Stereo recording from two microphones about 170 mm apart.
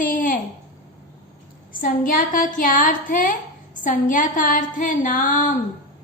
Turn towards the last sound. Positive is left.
turn(degrees=50)  # may be behind; listen again after turning